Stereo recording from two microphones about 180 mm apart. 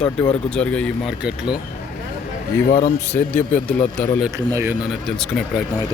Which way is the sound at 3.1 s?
10° left (ahead or behind).